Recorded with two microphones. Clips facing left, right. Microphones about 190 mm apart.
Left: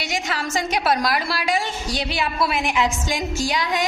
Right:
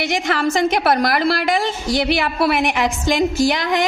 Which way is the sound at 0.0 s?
55° right (ahead or behind).